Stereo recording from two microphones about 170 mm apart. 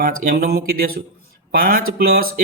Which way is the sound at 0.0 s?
60° right (ahead or behind).